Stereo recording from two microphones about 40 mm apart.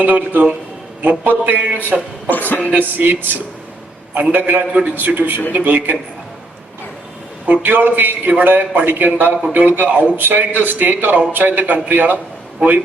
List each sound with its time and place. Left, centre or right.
0.0 s a man's voice: right
2.3 s a woman's voice: left
2.6 s a man's voice: right
4.7 s a man's voice: right
4.9 s a man's voice: right
7.4 s a man's voice: right